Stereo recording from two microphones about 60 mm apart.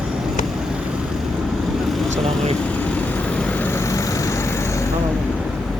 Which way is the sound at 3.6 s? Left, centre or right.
Left.